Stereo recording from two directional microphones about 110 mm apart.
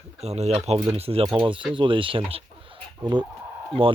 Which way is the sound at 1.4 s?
50° right (ahead or behind).